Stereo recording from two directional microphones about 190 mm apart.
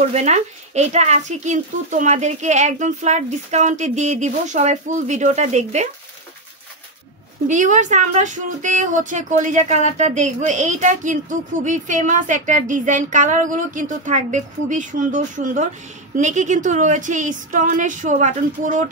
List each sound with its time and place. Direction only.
0.1 s speech: 35° right (ahead or behind)
7.4 s speech: 40° right (ahead or behind)